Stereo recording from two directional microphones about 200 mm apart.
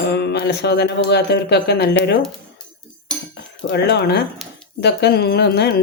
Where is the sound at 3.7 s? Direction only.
55° left (ahead or behind).